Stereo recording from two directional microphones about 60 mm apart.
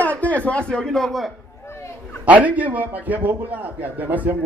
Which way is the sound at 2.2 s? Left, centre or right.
Right.